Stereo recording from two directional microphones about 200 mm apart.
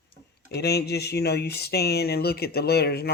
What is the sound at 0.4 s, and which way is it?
Speech, 55° left (ahead or behind).